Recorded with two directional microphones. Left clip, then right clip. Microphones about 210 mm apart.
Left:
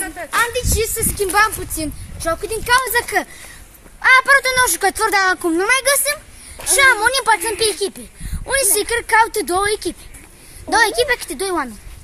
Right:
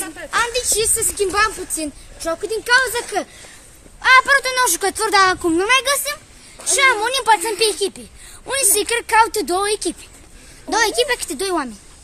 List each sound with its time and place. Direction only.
0.3 s a woman's voice: 50° right (ahead or behind)
1.3 s speech: centre (ahead or behind)
2.9 s speech: 10° left (ahead or behind)
4.0 s speech: 5° right (ahead or behind); by 9.9 s 20° right (ahead or behind)
10.7 s speech: 10° right (ahead or behind)